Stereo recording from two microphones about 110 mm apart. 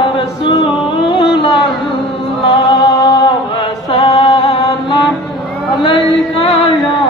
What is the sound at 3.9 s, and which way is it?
Mantra, 55° left (ahead or behind).